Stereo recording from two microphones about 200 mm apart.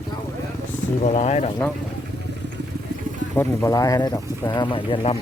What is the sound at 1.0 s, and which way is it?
Speech, 35° left (ahead or behind).